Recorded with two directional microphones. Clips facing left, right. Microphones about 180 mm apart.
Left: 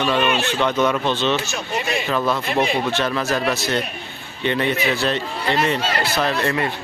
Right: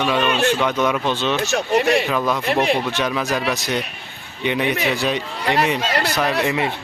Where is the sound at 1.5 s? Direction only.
70° right (ahead or behind).